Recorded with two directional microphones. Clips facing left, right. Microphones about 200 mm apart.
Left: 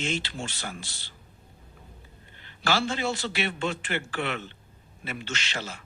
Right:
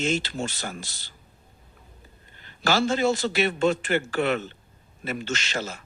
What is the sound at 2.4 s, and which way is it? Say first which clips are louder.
Speech: right 4 dB; 45° right (ahead or behind).